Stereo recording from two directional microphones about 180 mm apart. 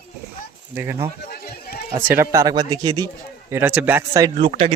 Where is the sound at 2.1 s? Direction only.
15° right (ahead or behind).